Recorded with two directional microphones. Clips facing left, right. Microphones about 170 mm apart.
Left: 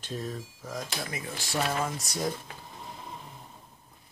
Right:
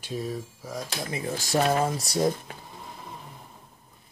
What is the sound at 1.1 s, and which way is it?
Speech, 40° right (ahead or behind).